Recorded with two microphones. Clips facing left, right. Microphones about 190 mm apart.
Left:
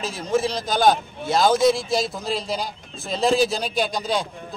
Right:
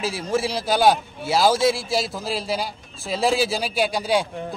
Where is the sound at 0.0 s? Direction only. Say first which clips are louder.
Left 1 dB; 10° right (ahead or behind).